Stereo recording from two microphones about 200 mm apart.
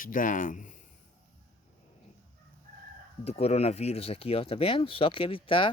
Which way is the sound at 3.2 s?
30° left (ahead or behind).